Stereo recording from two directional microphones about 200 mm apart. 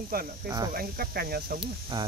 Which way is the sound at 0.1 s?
50° right (ahead or behind).